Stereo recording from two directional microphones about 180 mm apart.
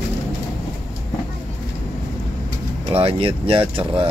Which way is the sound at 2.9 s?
30° right (ahead or behind).